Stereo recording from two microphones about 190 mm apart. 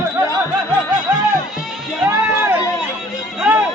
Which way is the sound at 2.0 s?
10° right (ahead or behind).